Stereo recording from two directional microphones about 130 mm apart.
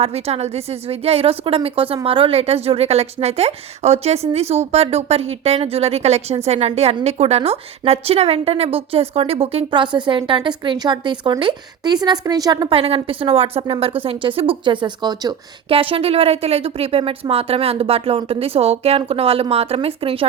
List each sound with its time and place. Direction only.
0.0 s a woman's voice: 55° right (ahead or behind); by 12.6 s 35° right (ahead or behind)
12.7 s a woman's voice: 45° right (ahead or behind)